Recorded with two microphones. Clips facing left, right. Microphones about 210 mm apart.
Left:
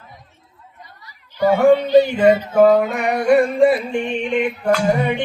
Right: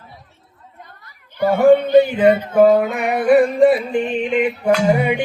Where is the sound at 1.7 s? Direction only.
55° right (ahead or behind).